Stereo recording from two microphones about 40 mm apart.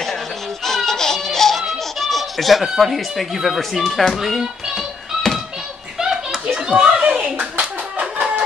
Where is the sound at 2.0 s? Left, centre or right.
Centre.